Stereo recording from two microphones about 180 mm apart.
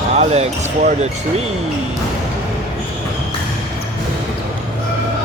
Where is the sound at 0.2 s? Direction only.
35° right (ahead or behind).